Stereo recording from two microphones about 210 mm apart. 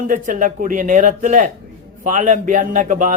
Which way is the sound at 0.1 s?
40° right (ahead or behind).